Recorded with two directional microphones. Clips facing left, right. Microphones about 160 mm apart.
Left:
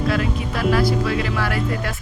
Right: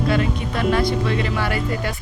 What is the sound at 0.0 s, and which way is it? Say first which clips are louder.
Speech: right 1 dB; centre (ahead or behind).